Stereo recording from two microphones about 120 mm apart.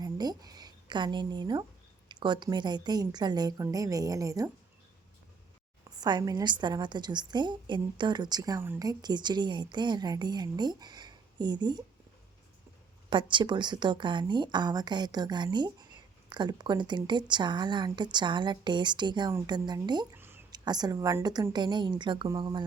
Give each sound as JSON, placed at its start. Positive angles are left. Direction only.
{"t": 0.0, "sound": "a woman's voice", "side_deg": -35}
{"t": 6.0, "sound": "a woman's voice", "side_deg": -35}
{"t": 13.1, "sound": "a woman's voice", "side_deg": -40}
{"t": 20.1, "sound": "a sound", "side_deg": -20}
{"t": 20.5, "sound": "a woman's voice", "side_deg": -35}
{"t": 21.5, "sound": "a woman's voice", "side_deg": -40}